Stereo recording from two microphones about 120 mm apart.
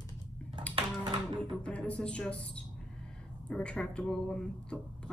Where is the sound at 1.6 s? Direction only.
10° left (ahead or behind).